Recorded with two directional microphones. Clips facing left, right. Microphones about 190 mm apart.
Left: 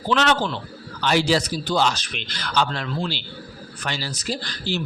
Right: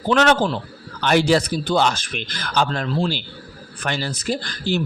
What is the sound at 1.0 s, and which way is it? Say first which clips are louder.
Speech: right 3 dB; 55° right (ahead or behind).